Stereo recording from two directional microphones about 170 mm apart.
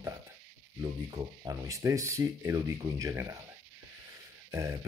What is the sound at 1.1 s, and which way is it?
Speech, 20° right (ahead or behind).